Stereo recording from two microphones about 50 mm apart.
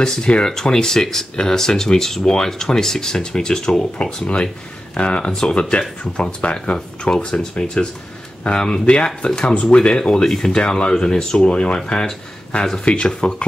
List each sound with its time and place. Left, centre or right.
0.0 s speech: centre
12.8 s speech: left